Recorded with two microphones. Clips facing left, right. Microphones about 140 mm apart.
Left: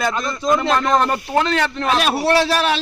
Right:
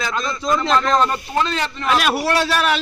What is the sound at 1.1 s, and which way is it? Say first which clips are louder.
Speech: left 3 dB; 60° left (ahead or behind).